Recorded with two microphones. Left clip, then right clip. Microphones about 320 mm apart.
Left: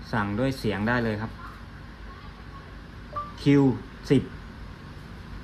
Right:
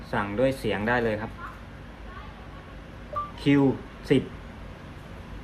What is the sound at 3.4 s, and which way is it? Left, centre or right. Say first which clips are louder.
Speech: left 1 dB; left.